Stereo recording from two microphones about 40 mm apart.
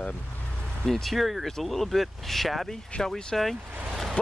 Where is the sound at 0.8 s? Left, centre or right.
Centre.